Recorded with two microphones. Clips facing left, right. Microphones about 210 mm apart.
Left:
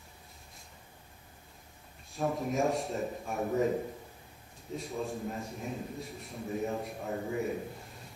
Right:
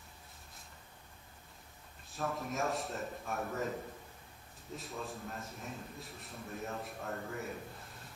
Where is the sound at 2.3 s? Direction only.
Centre (ahead or behind).